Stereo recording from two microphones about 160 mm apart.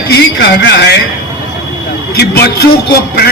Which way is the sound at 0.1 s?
90° left.